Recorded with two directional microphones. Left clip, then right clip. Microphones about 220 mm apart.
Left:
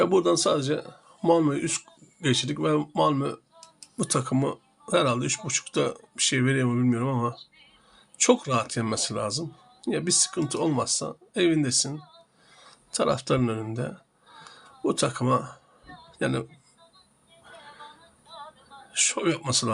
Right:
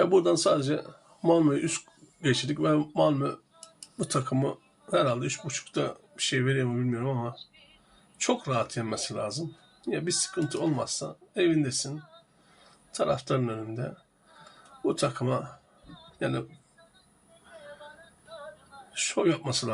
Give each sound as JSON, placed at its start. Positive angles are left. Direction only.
{"t": 0.0, "sound": "a man's voice", "side_deg": 20}
{"t": 18.9, "sound": "speech", "side_deg": 35}